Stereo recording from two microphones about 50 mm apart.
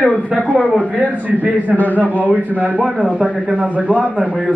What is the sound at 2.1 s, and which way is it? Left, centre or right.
Speech, left.